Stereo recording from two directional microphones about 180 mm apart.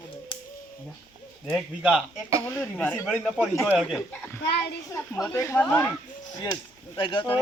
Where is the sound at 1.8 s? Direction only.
5° right (ahead or behind).